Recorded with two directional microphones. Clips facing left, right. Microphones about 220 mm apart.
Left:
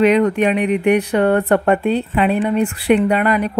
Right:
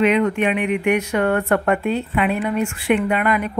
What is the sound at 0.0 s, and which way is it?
Speech, 35° left (ahead or behind).